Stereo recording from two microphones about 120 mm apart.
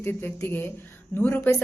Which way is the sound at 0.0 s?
20° left (ahead or behind).